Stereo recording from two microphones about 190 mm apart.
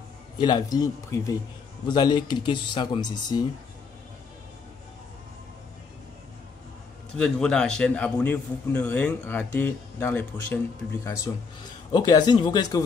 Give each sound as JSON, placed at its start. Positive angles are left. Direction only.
{"t": 0.4, "sound": "speech", "side_deg": 20}
{"t": 7.2, "sound": "a man's voice", "side_deg": 5}
{"t": 11.9, "sound": "speech", "side_deg": 20}